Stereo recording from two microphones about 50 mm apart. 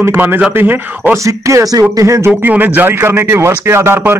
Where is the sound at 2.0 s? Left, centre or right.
Right.